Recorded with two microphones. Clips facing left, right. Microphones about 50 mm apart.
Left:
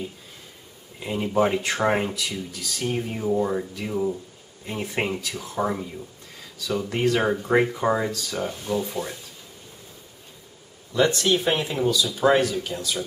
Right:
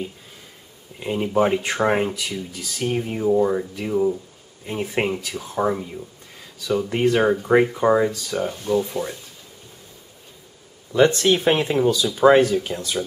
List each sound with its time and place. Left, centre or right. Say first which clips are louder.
1.0 s speech: right 2 dB; centre
10.9 s speech: right 4 dB; right